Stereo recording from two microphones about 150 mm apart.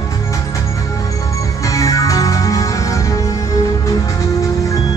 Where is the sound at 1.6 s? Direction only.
20° left (ahead or behind).